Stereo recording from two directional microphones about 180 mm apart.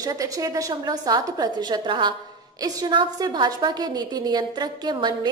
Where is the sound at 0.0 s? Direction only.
20° right (ahead or behind).